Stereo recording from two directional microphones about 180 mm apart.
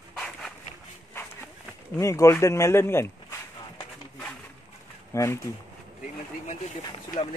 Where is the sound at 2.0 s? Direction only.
15° left (ahead or behind).